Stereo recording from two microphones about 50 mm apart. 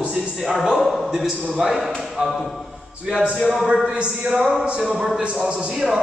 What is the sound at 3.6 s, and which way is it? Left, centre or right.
A man's voice, right.